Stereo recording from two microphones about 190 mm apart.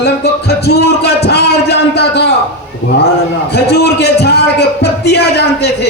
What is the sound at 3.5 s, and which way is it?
Speech, 60° left (ahead or behind).